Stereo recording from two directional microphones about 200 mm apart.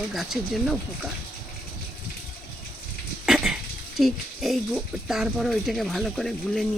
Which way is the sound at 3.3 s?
5° right (ahead or behind).